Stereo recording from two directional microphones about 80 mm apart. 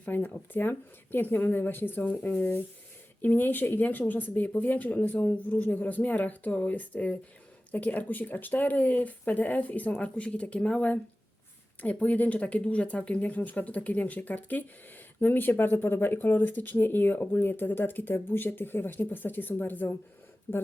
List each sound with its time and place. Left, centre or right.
0.0 s speech: left